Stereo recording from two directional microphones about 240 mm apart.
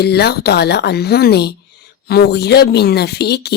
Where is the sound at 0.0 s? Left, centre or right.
Left.